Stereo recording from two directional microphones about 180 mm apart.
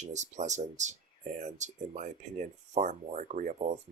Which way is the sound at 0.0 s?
40° right (ahead or behind).